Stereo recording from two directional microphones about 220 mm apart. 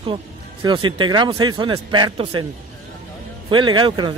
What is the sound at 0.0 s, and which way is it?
A man's voice, 25° right (ahead or behind).